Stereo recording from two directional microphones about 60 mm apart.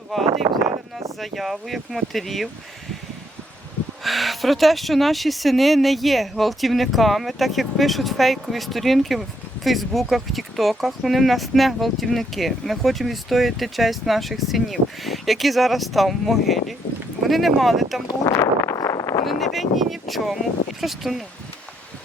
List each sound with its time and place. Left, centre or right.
0.1 s speech: centre
4.0 s speech: centre
18.3 s a sound: left
19.2 s speech: centre